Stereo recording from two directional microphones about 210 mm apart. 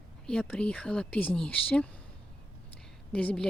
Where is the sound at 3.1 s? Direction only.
5° left (ahead or behind).